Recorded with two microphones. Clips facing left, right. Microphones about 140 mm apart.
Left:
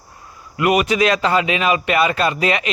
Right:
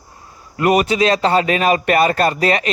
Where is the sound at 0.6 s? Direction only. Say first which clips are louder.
Right 1 dB; 35° right (ahead or behind).